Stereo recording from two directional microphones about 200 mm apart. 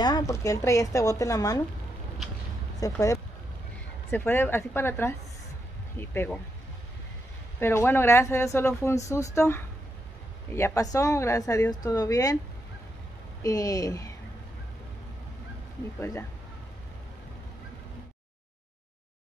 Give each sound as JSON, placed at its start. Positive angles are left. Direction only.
{"t": 0.0, "sound": "speech", "side_deg": 20}
{"t": 2.8, "sound": "speech", "side_deg": 15}
{"t": 7.6, "sound": "speech", "side_deg": 10}
{"t": 13.4, "sound": "speech", "side_deg": 15}
{"t": 16.0, "sound": "speech", "side_deg": 10}